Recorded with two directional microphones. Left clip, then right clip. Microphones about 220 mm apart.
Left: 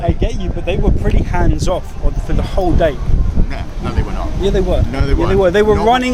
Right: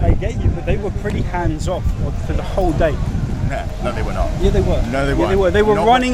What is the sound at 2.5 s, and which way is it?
Speech, 15° left (ahead or behind).